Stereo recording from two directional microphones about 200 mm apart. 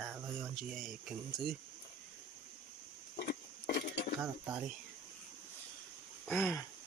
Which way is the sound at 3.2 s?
50° left (ahead or behind).